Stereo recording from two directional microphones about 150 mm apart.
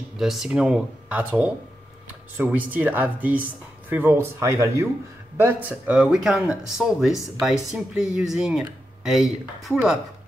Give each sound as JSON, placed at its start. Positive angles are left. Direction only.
{"t": 0.2, "sound": "speech", "side_deg": 0}